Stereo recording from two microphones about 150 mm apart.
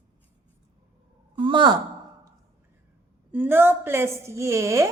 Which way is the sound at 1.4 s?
35° right (ahead or behind).